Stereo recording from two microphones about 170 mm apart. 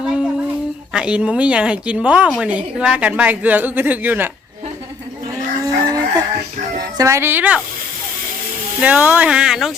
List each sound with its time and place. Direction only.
0.0 s child singing: 5° right (ahead or behind)
0.9 s a woman's voice: 5° right (ahead or behind)
5.8 s chicken: 20° right (ahead or behind)
6.7 s speech: 20° right (ahead or behind)
8.8 s a woman's voice: 10° right (ahead or behind)